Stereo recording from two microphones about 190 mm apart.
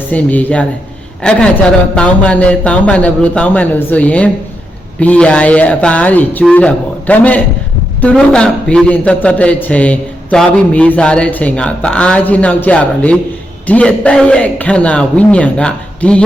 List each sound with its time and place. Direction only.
0.1 s a man's voice: 10° left (ahead or behind)